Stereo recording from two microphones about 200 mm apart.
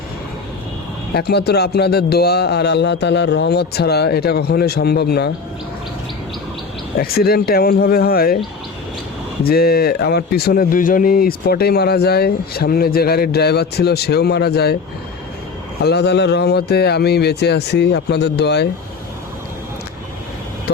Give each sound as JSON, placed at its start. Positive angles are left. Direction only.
{"t": 1.1, "sound": "speech", "side_deg": 55}
{"t": 7.0, "sound": "speech", "side_deg": 50}
{"t": 9.4, "sound": "speech", "side_deg": 50}
{"t": 15.8, "sound": "speech", "side_deg": 55}